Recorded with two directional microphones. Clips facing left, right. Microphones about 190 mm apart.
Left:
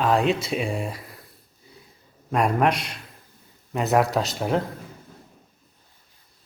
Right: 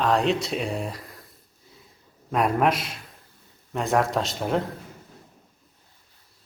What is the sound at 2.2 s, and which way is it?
Speech, centre (ahead or behind).